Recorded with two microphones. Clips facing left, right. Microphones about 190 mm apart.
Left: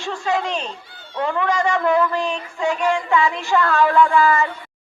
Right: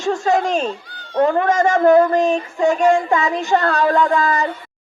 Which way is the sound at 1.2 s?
40° right (ahead or behind).